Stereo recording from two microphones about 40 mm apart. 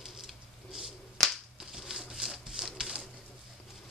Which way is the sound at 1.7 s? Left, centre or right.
Centre.